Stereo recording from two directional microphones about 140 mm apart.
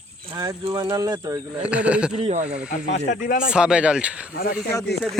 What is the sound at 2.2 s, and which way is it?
Speech, 50° right (ahead or behind).